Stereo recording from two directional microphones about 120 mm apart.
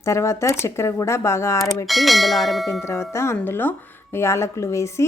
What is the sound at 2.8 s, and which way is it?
A woman's voice, 20° left (ahead or behind).